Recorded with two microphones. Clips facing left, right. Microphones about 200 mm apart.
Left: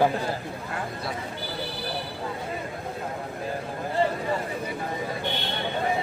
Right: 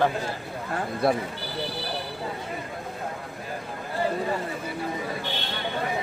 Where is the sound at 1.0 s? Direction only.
55° right (ahead or behind).